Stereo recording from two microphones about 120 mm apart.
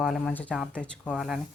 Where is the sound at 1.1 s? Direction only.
5° right (ahead or behind).